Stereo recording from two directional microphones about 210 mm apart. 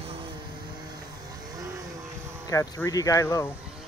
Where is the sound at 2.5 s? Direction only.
15° left (ahead or behind).